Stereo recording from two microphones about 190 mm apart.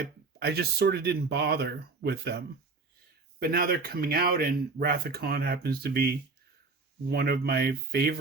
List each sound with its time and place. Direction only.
0.0 s speech: 60° right (ahead or behind)
3.4 s speech: 55° right (ahead or behind)